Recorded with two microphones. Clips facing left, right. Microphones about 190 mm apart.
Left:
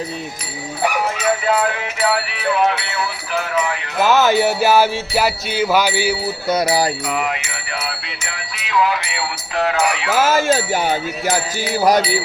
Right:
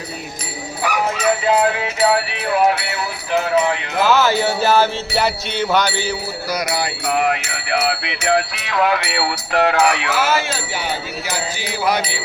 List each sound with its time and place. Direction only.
4.0 s music: 20° left (ahead or behind)
6.5 s music: 30° left (ahead or behind)
7.1 s speech: 55° right (ahead or behind)
10.1 s speech: 45° left (ahead or behind)